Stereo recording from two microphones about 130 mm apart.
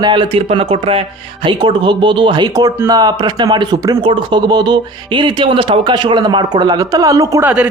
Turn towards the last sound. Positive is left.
turn(degrees=-10)  # may be behind; listen again after turning